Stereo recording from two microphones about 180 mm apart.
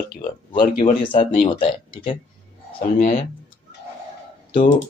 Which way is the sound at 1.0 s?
30° left (ahead or behind).